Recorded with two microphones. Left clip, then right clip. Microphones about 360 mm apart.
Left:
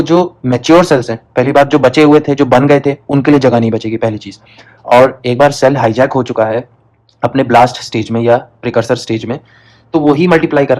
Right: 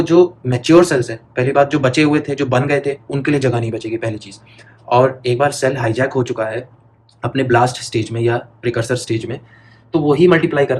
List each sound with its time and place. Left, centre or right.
0.0 s speech: centre